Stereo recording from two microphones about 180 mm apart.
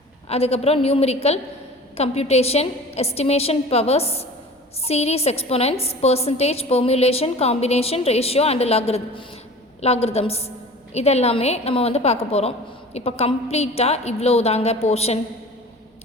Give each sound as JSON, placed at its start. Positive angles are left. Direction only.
{"t": 0.3, "sound": "a woman's voice", "side_deg": 35}